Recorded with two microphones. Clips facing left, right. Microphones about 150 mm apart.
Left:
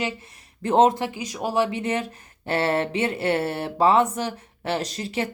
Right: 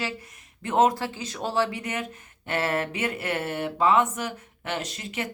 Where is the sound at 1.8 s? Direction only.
30° left (ahead or behind).